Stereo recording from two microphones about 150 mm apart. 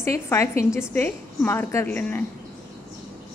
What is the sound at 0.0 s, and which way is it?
A woman's voice, 20° left (ahead or behind).